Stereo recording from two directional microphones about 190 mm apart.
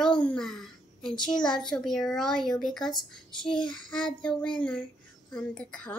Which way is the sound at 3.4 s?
25° left (ahead or behind).